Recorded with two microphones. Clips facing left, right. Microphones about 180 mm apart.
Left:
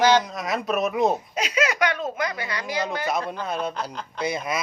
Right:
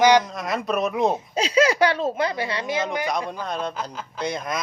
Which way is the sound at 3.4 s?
5° left (ahead or behind).